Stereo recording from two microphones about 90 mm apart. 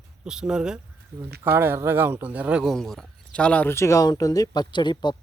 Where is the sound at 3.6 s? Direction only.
30° left (ahead or behind); by 5.2 s 55° left (ahead or behind).